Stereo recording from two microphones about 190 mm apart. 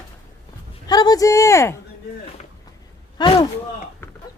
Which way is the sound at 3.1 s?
25° left (ahead or behind).